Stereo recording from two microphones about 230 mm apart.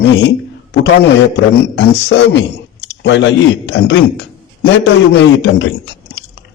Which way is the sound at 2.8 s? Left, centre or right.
Left.